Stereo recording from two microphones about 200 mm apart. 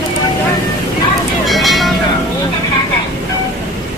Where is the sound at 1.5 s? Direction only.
Centre (ahead or behind).